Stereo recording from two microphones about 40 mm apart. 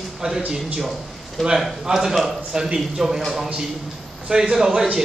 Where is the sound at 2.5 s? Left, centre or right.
Right.